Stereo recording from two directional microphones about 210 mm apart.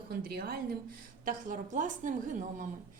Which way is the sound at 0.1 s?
50° right (ahead or behind).